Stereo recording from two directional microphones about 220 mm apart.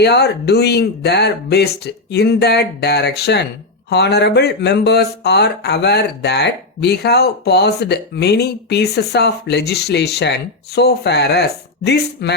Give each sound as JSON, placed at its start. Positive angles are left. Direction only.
{"t": 0.0, "sound": "speech", "side_deg": 50}